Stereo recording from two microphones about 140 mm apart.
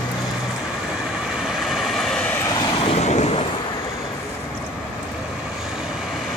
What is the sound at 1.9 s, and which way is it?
Vehicle, centre (ahead or behind).